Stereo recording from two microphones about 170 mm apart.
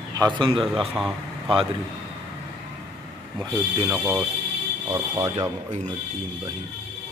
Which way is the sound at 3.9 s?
10° right (ahead or behind).